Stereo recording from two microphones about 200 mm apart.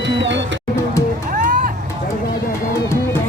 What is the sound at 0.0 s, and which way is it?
Music, 60° right (ahead or behind).